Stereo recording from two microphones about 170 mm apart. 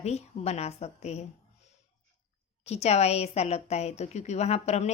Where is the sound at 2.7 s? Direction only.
40° left (ahead or behind).